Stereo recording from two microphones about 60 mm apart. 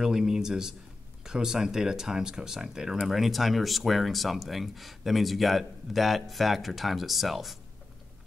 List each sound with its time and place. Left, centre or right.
0.0 s speech: centre